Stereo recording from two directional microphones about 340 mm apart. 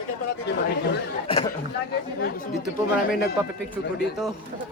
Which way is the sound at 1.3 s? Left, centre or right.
Centre.